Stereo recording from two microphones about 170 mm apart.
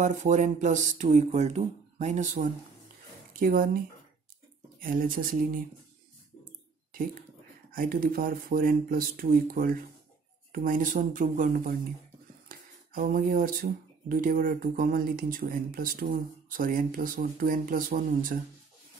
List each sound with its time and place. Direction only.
0.0 s speech: 45° right (ahead or behind)
3.3 s speech: 60° right (ahead or behind)
7.7 s speech: 55° right (ahead or behind)